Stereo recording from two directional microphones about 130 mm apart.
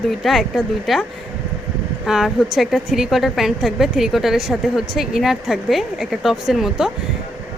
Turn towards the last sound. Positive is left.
turn(degrees=0)  # may be behind; listen again after turning